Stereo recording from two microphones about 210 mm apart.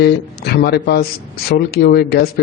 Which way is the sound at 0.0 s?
50° left (ahead or behind).